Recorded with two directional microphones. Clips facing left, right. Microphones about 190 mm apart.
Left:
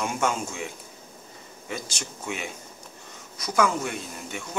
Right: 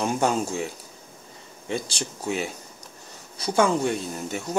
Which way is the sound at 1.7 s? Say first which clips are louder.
Right 6 dB; 30° right (ahead or behind).